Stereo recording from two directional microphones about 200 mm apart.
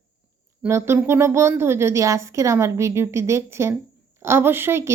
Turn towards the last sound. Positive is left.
turn(degrees=-10)  # may be behind; listen again after turning